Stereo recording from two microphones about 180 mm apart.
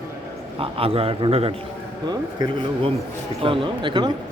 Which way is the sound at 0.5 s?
30° right (ahead or behind).